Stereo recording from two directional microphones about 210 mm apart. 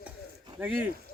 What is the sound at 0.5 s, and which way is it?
Speech, 10° right (ahead or behind).